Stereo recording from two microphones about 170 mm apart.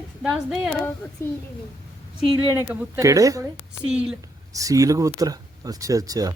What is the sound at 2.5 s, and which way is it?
Speech, 15° right (ahead or behind).